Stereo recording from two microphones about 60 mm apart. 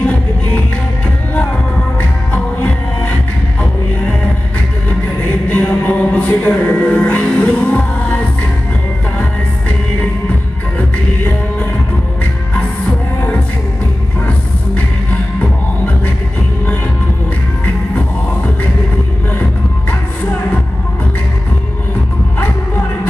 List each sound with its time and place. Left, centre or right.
2.0 s music: left
5.5 s music: left